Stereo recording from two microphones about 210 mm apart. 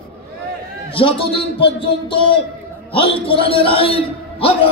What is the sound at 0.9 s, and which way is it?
A man's voice, 25° left (ahead or behind).